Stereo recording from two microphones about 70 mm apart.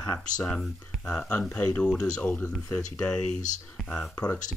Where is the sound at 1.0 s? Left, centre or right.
Left.